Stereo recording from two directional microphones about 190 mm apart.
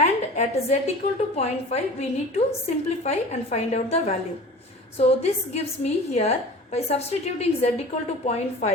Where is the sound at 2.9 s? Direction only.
35° left (ahead or behind).